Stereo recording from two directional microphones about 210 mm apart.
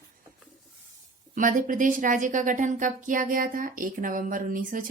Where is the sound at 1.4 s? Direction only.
40° right (ahead or behind).